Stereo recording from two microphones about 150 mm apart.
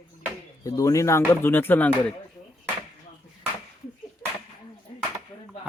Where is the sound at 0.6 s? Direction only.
20° left (ahead or behind).